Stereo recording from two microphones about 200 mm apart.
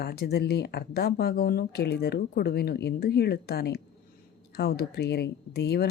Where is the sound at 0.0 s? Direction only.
50° left (ahead or behind).